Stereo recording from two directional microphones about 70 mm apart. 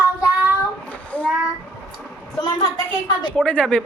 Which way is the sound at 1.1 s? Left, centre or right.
Centre.